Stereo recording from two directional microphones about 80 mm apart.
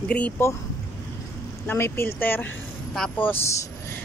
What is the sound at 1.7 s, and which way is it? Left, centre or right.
Speech, left.